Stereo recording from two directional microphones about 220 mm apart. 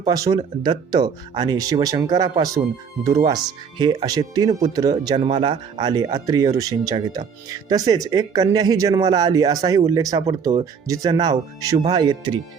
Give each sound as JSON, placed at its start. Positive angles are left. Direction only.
{"t": 0.0, "sound": "speech", "side_deg": -15}